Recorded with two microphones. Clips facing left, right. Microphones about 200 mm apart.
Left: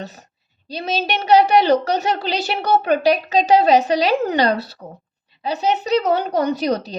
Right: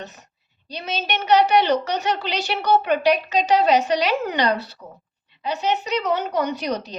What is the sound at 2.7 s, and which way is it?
A child's voice, 35° left (ahead or behind).